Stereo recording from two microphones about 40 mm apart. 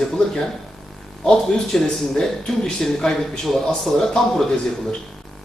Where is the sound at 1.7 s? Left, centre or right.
Centre.